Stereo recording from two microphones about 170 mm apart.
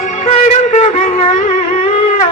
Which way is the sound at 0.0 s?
45° left (ahead or behind).